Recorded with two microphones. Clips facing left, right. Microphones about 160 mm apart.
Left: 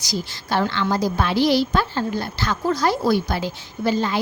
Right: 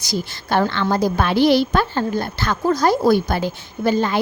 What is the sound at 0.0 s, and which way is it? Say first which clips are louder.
A woman's voice: right 3 dB; 55° right (ahead or behind).